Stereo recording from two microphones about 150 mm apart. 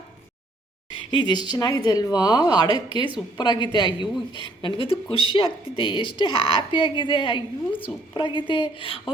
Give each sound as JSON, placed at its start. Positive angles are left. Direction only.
{"t": 0.9, "sound": "a woman's voice", "side_deg": 30}